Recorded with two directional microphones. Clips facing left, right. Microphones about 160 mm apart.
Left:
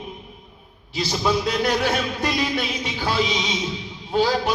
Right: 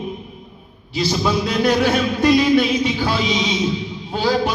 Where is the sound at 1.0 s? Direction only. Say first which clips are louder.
Right 2 dB; 50° left (ahead or behind).